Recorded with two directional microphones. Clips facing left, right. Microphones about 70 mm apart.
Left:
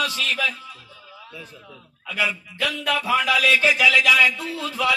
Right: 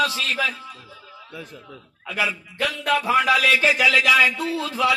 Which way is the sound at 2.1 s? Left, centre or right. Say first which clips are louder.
Even; centre.